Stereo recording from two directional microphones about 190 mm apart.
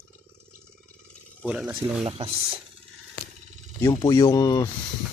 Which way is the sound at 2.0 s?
30° right (ahead or behind).